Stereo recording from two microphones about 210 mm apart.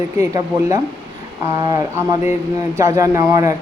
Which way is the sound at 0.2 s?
15° right (ahead or behind).